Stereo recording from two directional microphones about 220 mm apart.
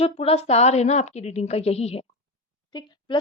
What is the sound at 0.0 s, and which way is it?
A woman's voice, 30° left (ahead or behind).